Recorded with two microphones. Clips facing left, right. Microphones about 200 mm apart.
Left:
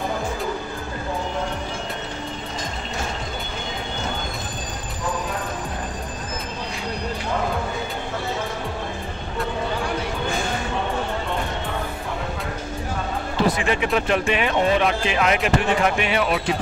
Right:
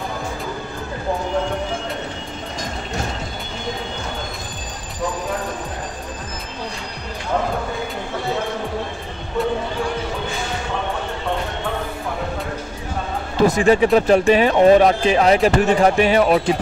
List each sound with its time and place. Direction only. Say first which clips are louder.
13.6 s speech: right 8 dB; 40° right (ahead or behind)